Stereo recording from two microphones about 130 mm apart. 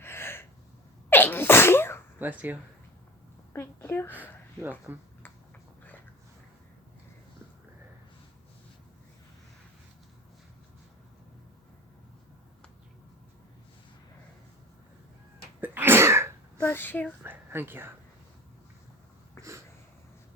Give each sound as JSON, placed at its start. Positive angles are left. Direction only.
{"t": 0.0, "sound": "gasp", "side_deg": 20}
{"t": 1.1, "sound": "sneeze", "side_deg": 15}
{"t": 2.1, "sound": "speech", "side_deg": -15}
{"t": 3.5, "sound": "a woman's voice", "side_deg": 20}
{"t": 4.1, "sound": "a sound", "side_deg": -15}
{"t": 15.6, "sound": "cough", "side_deg": -15}
{"t": 16.6, "sound": "a sound", "side_deg": 15}
{"t": 17.2, "sound": "a woman's voice", "side_deg": -15}
{"t": 19.4, "sound": "a sound", "side_deg": -20}